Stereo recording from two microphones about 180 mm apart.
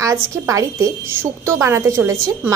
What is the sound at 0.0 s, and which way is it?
A woman's voice, 15° right (ahead or behind).